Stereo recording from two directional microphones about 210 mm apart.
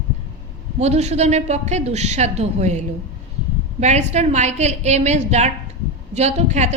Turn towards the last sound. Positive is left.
turn(degrees=-35)  # may be behind; listen again after turning